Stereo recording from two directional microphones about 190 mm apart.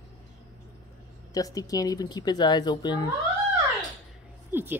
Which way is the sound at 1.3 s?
20° left (ahead or behind).